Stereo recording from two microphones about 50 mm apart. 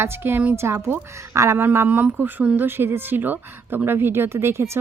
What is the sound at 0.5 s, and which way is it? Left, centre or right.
Speech, right.